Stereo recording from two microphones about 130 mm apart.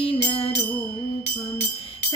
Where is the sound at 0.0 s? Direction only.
45° left (ahead or behind).